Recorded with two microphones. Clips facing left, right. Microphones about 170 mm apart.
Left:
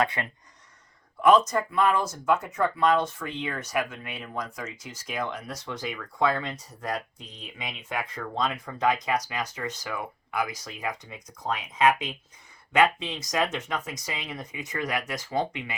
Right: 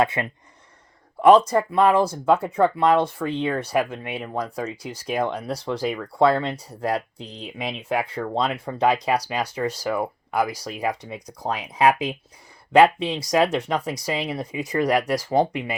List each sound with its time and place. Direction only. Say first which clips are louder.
0.0 s speech: right 5 dB; 25° right (ahead or behind)